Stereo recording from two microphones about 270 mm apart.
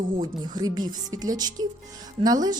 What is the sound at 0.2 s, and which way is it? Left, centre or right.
A woman's voice, centre.